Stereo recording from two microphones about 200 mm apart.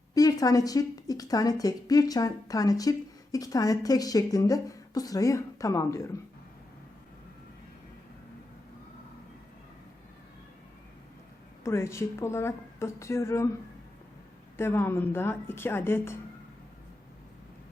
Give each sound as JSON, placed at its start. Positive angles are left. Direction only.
{"t": 0.1, "sound": "speech", "side_deg": 20}
{"t": 11.6, "sound": "speech", "side_deg": 15}
{"t": 14.5, "sound": "speech", "side_deg": 10}